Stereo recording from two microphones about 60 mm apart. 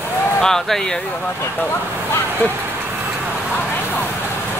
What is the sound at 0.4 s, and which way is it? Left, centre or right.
Speech, centre.